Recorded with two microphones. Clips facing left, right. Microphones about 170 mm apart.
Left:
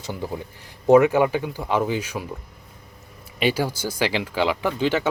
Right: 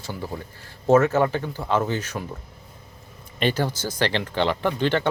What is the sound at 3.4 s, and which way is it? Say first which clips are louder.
Speech: left 1 dB; 10° left (ahead or behind).